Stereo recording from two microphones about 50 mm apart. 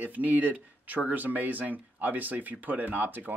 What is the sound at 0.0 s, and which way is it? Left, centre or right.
Speech, right.